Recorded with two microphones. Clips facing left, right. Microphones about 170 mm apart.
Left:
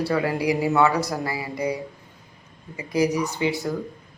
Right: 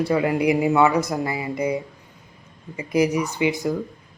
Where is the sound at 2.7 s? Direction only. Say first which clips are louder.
Right 2 dB; 20° right (ahead or behind).